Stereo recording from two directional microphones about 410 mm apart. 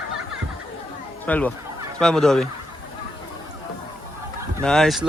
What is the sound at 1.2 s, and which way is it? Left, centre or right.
Speech, centre.